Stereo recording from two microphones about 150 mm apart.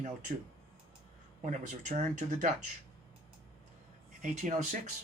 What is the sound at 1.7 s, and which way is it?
Speech, 55° right (ahead or behind).